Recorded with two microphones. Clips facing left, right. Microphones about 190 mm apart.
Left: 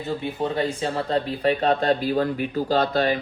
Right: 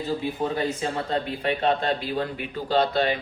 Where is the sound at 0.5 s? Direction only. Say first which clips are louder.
Left 2 dB; 35° left (ahead or behind).